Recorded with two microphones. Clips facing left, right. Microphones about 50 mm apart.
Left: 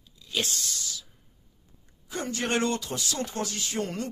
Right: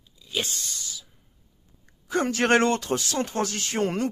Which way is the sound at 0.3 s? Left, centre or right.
Centre.